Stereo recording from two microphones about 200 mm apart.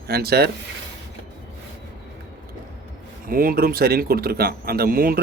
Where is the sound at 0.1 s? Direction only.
50° right (ahead or behind).